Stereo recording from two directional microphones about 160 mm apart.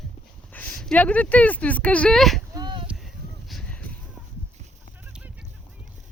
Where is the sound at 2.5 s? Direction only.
30° right (ahead or behind).